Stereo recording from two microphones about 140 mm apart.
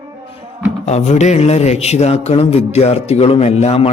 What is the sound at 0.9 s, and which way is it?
A man's voice, 55° left (ahead or behind).